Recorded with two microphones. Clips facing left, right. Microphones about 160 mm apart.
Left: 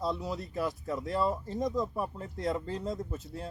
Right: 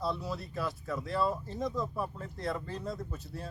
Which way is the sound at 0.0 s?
15° left (ahead or behind).